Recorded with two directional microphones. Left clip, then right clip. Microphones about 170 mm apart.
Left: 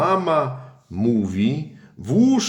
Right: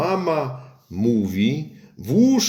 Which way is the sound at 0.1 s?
Centre (ahead or behind).